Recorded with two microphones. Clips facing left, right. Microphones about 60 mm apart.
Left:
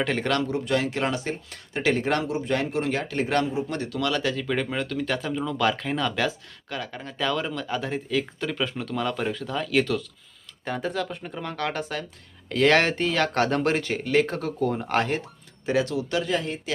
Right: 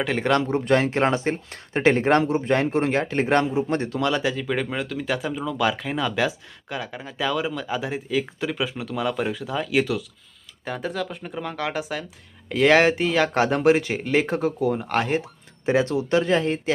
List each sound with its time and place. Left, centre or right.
0.0 s speech: centre
0.4 s speech: right; by 14.7 s centre
14.7 s speech: centre
15.6 s speech: right